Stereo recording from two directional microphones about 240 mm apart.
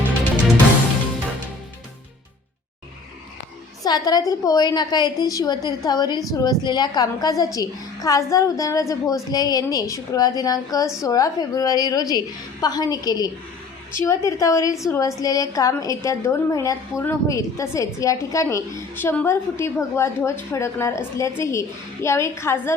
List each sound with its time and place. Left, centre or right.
3.8 s a woman's voice: centre